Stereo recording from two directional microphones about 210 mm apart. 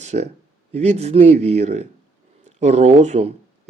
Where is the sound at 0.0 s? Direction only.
35° right (ahead or behind).